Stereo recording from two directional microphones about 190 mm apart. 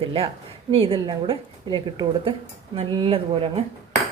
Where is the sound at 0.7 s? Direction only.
30° right (ahead or behind).